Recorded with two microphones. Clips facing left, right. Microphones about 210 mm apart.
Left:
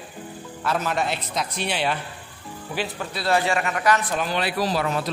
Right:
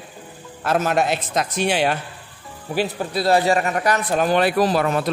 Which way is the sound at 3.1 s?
40° right (ahead or behind).